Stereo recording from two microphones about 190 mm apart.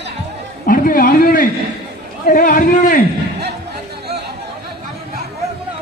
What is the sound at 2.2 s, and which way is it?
Speech, 50° left (ahead or behind).